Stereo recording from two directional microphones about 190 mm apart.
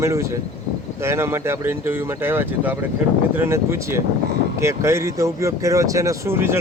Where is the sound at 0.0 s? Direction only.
15° right (ahead or behind).